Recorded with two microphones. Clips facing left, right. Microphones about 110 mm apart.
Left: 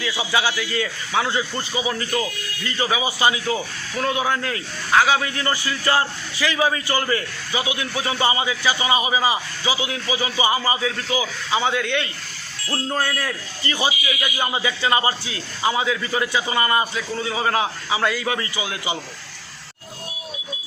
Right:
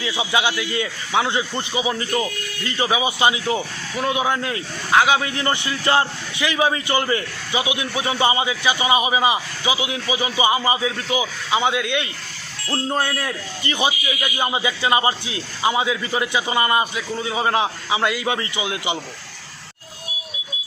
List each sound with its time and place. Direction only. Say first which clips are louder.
0.0 s a man's voice: right 1 dB; 20° right (ahead or behind)
12.6 s a man's voice: right 2 dB; 20° right (ahead or behind)